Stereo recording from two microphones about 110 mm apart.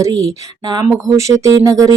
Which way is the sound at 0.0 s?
30° right (ahead or behind).